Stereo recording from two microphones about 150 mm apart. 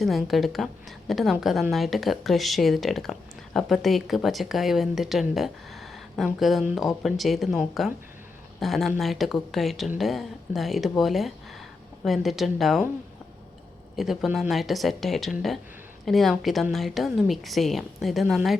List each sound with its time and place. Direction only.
0.0 s speech: centre (ahead or behind)
13.9 s speech: centre (ahead or behind)